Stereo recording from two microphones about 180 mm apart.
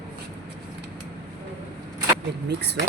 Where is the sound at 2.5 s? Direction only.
70° right (ahead or behind).